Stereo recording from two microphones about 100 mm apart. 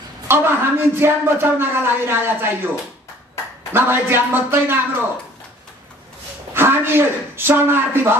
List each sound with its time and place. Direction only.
0.3 s speech: 20° right (ahead or behind)
3.7 s speech: 20° right (ahead or behind)
6.5 s speech: 25° right (ahead or behind)